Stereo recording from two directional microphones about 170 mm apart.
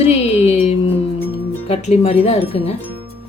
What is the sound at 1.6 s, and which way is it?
Speech, 35° left (ahead or behind).